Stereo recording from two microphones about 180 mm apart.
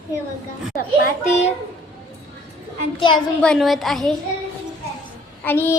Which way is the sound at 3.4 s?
Centre (ahead or behind).